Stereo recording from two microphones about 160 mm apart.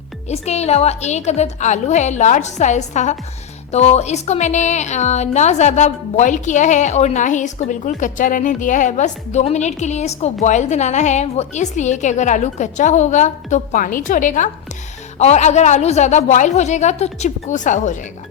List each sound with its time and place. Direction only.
0.3 s speech: 45° left (ahead or behind)